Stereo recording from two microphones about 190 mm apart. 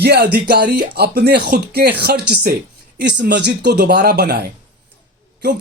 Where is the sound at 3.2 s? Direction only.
65° right (ahead or behind).